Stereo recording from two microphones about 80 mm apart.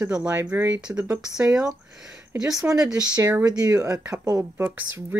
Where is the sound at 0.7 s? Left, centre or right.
Centre.